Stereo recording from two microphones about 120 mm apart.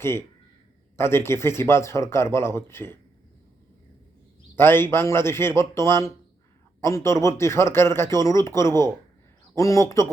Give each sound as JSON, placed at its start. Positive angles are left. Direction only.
{"t": 0.0, "sound": "speech", "side_deg": 20}
{"t": 4.5, "sound": "speech", "side_deg": 20}